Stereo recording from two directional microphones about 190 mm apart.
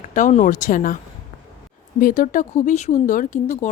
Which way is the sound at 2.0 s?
45° left (ahead or behind).